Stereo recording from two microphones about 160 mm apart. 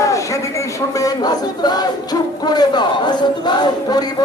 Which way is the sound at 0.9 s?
25° left (ahead or behind).